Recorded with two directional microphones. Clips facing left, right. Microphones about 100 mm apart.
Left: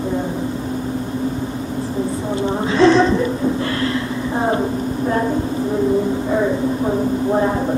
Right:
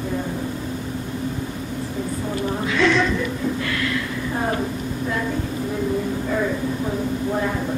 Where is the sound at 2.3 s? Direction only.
30° left (ahead or behind).